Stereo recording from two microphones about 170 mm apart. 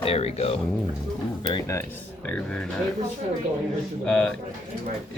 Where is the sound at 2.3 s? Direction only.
5° left (ahead or behind).